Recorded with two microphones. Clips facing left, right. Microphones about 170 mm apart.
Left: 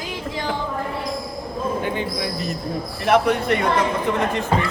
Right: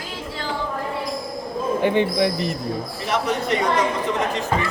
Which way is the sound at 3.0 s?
55° left (ahead or behind).